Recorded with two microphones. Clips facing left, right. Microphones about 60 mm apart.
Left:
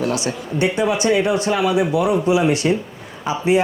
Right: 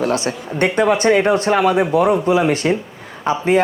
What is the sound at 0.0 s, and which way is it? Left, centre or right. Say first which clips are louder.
A man's voice: right 2 dB; right.